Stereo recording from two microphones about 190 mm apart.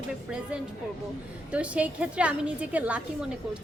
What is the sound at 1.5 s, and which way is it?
A woman's voice, 5° right (ahead or behind).